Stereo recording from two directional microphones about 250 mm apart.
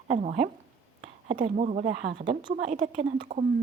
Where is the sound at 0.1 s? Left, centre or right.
Right.